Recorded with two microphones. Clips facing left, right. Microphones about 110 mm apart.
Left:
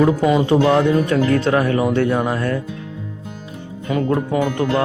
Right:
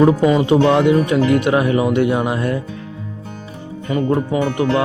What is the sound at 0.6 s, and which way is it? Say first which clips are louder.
Speech: right 2 dB; 20° right (ahead or behind).